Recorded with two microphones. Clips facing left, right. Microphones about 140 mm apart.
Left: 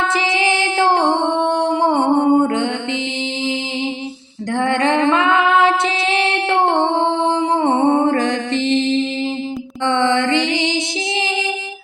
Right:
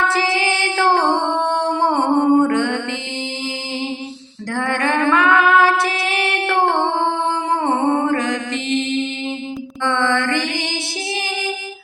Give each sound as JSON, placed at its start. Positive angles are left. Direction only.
{"t": 0.0, "sound": "music", "side_deg": 20}
{"t": 4.5, "sound": "female singing", "side_deg": 20}
{"t": 7.6, "sound": "music", "side_deg": 20}
{"t": 9.8, "sound": "mantra", "side_deg": 20}